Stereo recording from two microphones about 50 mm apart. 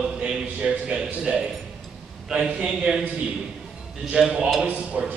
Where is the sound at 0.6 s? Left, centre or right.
Right.